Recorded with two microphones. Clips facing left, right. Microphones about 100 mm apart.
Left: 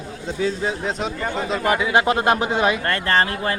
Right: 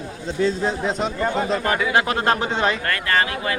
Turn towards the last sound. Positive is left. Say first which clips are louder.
# left 2 dB
turn(degrees=35)  # may be behind; listen again after turning